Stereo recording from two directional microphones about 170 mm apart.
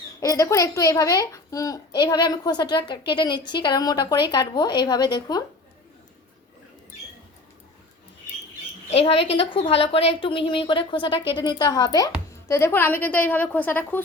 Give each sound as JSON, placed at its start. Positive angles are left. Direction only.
{"t": 0.2, "sound": "a woman's voice", "side_deg": 20}
{"t": 8.9, "sound": "a woman's voice", "side_deg": 35}